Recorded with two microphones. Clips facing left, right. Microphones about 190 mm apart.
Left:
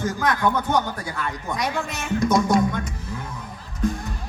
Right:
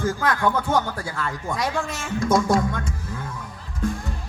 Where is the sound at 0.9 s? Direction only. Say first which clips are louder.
Even; 20° left (ahead or behind).